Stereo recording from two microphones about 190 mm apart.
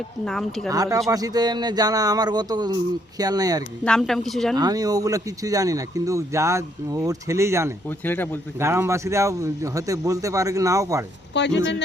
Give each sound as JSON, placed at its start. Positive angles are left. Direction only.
{"t": 0.3, "sound": "speech", "side_deg": 0}
{"t": 0.7, "sound": "speech", "side_deg": -20}
{"t": 3.8, "sound": "speech", "side_deg": 5}
{"t": 4.5, "sound": "speech", "side_deg": -20}
{"t": 7.9, "sound": "speech", "side_deg": 10}
{"t": 8.5, "sound": "speech", "side_deg": -15}
{"t": 11.3, "sound": "speech", "side_deg": 65}